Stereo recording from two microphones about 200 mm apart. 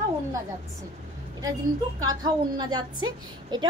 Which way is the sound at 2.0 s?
20° right (ahead or behind).